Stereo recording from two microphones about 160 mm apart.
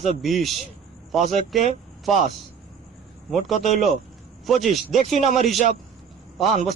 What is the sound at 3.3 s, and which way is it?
A man's voice, centre (ahead or behind).